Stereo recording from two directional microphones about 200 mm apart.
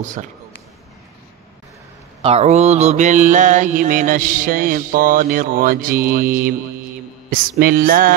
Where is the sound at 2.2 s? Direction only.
35° right (ahead or behind).